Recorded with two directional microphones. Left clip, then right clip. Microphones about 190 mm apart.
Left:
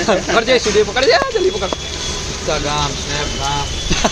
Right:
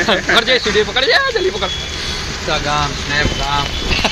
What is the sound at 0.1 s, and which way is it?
Speech, 30° left (ahead or behind).